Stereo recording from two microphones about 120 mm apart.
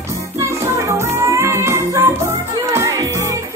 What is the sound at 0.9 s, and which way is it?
Music, 25° right (ahead or behind).